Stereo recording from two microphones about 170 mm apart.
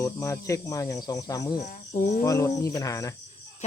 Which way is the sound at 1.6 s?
45° left (ahead or behind).